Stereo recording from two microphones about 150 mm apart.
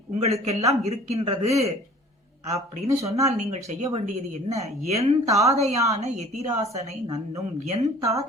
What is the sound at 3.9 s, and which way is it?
A woman's voice, 45° right (ahead or behind).